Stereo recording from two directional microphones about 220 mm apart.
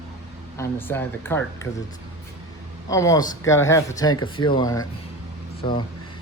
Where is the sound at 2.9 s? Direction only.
15° left (ahead or behind).